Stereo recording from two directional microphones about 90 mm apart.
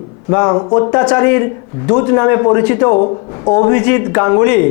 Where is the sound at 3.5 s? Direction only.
20° left (ahead or behind).